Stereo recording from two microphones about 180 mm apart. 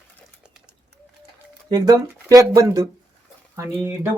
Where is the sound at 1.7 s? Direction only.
20° right (ahead or behind).